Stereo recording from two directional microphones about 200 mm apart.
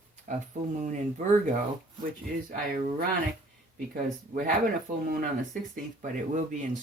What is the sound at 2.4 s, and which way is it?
Speech, 45° right (ahead or behind).